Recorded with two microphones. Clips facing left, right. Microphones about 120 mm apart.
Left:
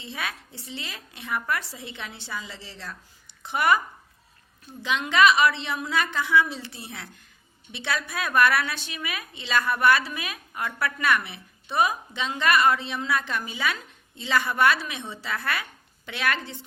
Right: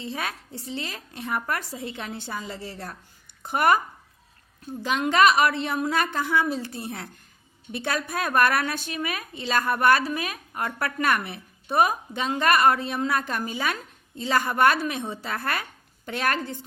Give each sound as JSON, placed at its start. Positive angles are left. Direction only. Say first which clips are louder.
{"t": 0.0, "sound": "a woman's voice", "louder": "right 3 dB", "side_deg": -40}
{"t": 4.8, "sound": "a woman's voice", "louder": "right 1 dB", "side_deg": -45}